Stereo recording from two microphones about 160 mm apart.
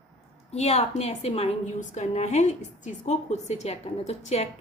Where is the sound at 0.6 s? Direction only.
45° left (ahead or behind).